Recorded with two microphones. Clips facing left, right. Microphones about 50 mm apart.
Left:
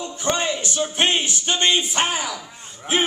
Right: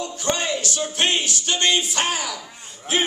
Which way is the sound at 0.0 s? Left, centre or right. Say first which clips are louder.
Left 1 dB; centre.